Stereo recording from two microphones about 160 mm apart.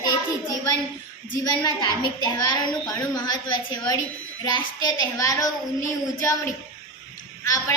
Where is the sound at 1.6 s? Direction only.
25° left (ahead or behind).